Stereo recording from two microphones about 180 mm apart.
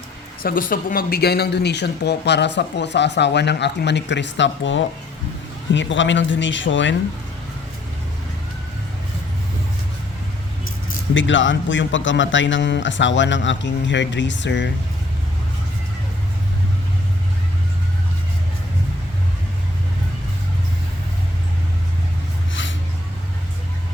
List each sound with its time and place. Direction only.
0.4 s speech: 50° left (ahead or behind); by 6.9 s 90° left
11.1 s speech: 90° left